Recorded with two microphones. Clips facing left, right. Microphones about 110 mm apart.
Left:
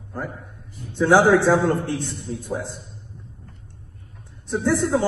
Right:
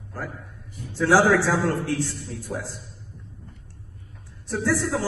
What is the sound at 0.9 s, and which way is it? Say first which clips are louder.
A man's voice: left 3 dB; 20° left (ahead or behind).